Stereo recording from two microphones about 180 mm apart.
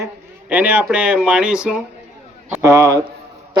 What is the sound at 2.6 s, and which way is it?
Speech, 20° right (ahead or behind).